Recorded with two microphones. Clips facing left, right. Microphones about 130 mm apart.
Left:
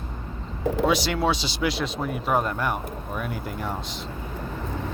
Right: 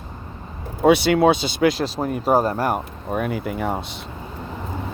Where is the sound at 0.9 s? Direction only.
60° right (ahead or behind).